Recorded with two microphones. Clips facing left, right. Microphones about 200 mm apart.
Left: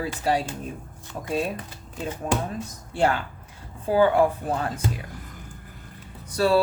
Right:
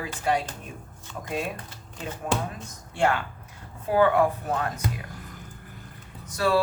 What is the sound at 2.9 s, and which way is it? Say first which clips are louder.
Speech: left 1 dB; 35° left (ahead or behind).